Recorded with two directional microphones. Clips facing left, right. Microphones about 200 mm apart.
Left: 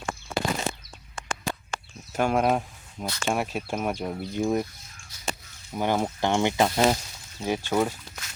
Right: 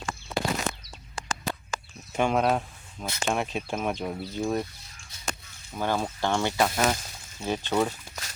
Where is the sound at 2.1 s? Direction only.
5° left (ahead or behind).